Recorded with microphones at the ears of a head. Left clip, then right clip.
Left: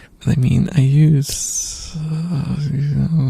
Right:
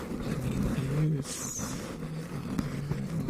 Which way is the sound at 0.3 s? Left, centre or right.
Left.